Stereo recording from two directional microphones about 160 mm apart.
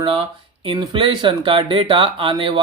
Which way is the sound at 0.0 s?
35° right (ahead or behind).